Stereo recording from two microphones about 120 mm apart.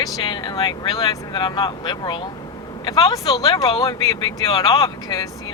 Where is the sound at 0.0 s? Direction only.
40° left (ahead or behind).